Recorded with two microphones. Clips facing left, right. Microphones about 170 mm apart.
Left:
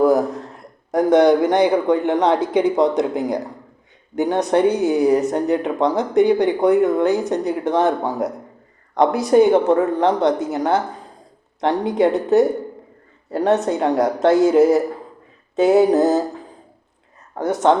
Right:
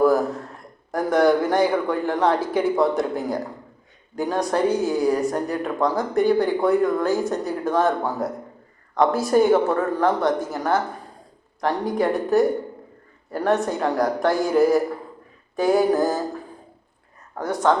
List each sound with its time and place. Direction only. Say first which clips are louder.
0.0 s speech: left 3 dB; 20° left (ahead or behind)
17.3 s speech: left 4 dB; 20° left (ahead or behind)